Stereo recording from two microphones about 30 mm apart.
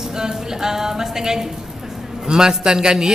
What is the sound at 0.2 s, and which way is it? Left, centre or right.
A woman's voice, centre.